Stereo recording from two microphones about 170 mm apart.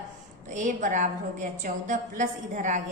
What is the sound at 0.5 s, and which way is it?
A woman's voice, 45° right (ahead or behind).